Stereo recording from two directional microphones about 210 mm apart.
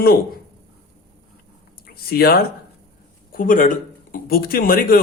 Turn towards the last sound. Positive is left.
turn(degrees=45)  # may be behind; listen again after turning